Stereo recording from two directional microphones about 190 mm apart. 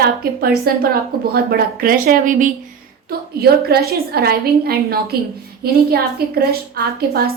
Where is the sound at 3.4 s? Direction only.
55° right (ahead or behind).